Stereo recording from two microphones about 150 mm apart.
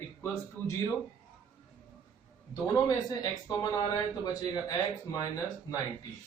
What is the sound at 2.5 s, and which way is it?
Speech, 25° left (ahead or behind).